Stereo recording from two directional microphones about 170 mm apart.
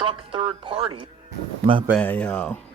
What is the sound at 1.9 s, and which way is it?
Speech, 10° left (ahead or behind).